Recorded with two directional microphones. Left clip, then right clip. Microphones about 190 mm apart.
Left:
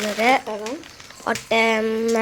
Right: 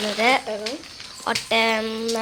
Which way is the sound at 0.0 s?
20° left (ahead or behind).